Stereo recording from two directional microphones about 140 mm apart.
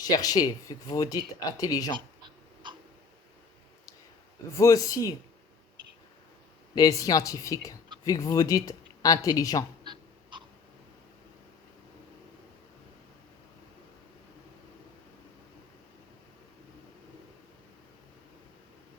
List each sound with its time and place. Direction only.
0.1 s speech: 25° left (ahead or behind)
4.5 s speech: 20° left (ahead or behind)
6.7 s speech: 25° left (ahead or behind)
9.8 s a sound: 35° right (ahead or behind)